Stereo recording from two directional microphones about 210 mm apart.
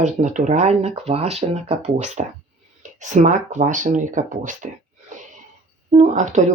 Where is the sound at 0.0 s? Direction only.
35° right (ahead or behind).